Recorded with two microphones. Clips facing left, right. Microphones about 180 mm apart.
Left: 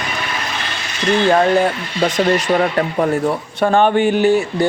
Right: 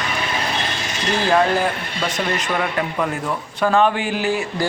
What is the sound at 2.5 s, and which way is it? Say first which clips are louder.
Speech: left 6 dB; 35° left (ahead or behind).